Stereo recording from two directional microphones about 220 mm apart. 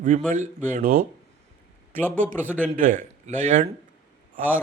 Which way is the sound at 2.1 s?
35° right (ahead or behind).